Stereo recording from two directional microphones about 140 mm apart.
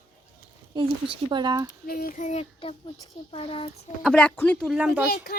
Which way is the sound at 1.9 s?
85° left.